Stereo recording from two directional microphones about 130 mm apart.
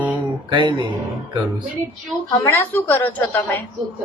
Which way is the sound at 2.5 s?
15° left (ahead or behind).